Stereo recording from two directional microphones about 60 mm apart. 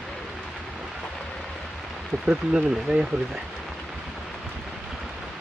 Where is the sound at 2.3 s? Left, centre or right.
Centre.